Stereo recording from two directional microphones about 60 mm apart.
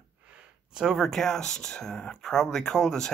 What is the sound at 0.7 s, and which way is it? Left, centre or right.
Speech, centre.